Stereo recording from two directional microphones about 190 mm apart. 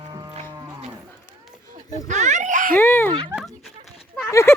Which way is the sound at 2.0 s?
40° right (ahead or behind).